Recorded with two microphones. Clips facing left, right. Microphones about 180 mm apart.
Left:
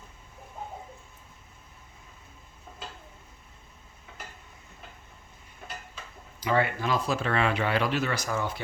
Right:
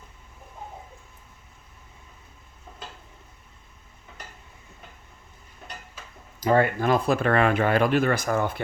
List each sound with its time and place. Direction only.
6.4 s speech: 45° right (ahead or behind)